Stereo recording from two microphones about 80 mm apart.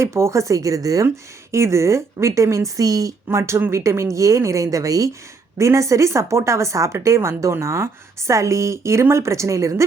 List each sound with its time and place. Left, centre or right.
0.0 s a woman's voice: right
1.0 s a woman's voice: right
3.2 s a woman's voice: right